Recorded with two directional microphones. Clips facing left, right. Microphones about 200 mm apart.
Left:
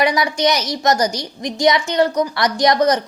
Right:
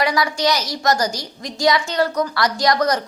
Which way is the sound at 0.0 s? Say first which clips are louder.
Left 3 dB; 20° left (ahead or behind).